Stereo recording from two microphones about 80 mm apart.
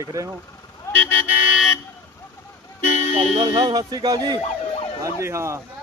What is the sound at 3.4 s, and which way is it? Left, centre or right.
Speech, right.